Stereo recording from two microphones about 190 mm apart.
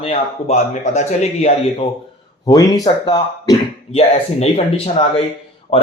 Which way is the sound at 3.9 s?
35° left (ahead or behind).